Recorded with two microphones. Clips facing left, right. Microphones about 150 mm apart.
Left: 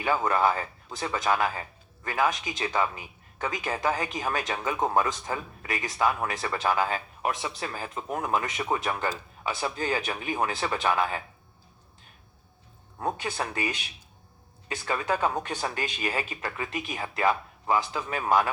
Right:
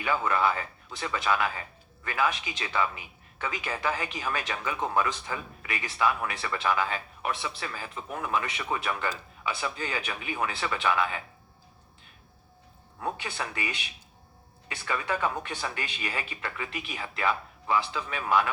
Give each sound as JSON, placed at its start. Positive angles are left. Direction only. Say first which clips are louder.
{"t": 0.1, "sound": "speech", "louder": "left 2 dB", "side_deg": 40}
{"t": 13.0, "sound": "speech", "louder": "left 3 dB", "side_deg": 40}
{"t": 14.8, "sound": "speech", "louder": "left 2 dB", "side_deg": 35}